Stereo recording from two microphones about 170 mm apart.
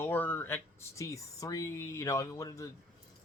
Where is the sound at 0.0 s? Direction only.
10° left (ahead or behind).